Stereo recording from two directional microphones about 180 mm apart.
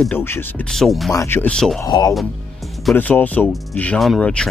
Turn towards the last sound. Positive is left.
turn(degrees=5)  # may be behind; listen again after turning